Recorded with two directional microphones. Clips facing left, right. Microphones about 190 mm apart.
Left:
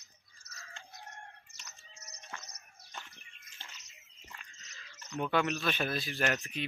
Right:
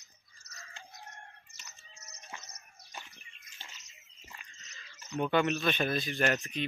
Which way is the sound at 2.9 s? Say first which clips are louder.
Even; 15° right (ahead or behind).